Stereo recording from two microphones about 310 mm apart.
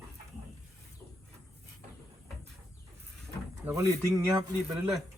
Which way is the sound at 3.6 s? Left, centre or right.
Centre.